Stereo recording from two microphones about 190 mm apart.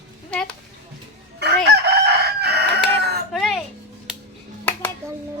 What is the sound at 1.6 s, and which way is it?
Chicken, 60° right (ahead or behind).